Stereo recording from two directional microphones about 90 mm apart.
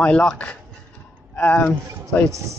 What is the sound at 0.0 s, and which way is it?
Speech, 10° left (ahead or behind).